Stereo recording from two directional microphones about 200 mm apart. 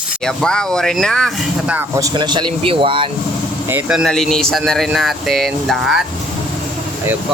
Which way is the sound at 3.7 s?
5° right (ahead or behind).